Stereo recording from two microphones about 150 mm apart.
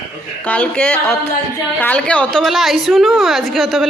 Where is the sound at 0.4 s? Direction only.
10° left (ahead or behind).